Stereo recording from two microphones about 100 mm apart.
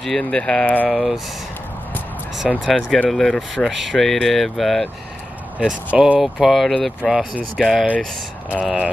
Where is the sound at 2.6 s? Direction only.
5° left (ahead or behind).